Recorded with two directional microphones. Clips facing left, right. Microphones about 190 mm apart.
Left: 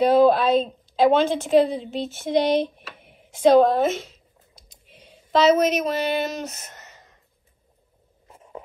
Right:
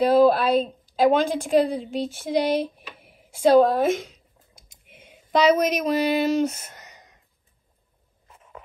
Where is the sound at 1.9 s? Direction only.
10° right (ahead or behind).